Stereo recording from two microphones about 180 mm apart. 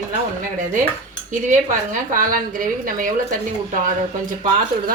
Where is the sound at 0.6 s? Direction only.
50° right (ahead or behind).